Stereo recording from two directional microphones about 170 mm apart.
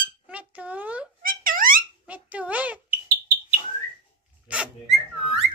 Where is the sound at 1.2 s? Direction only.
55° right (ahead or behind).